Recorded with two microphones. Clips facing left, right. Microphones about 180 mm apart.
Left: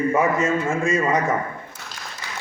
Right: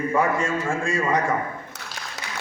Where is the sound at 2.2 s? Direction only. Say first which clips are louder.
Right 1 dB; 75° right (ahead or behind).